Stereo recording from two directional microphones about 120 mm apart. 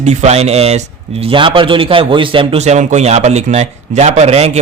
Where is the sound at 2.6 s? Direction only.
80° right.